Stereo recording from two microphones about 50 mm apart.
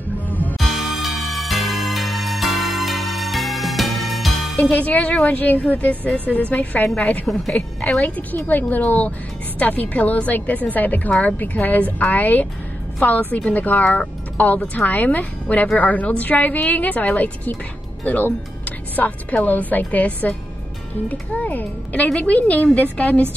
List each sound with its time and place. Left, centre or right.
0.3 s music: left
0.6 s music: centre
4.7 s a woman's voice: left